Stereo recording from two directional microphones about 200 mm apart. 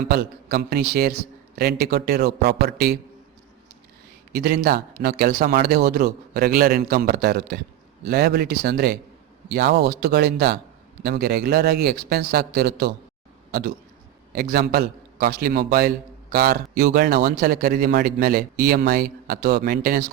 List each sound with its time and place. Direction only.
0.1 s a man's voice: 50° right (ahead or behind)
4.3 s a man's voice: 50° right (ahead or behind)